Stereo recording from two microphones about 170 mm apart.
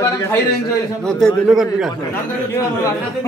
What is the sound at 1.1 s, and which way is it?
Speech, centre (ahead or behind).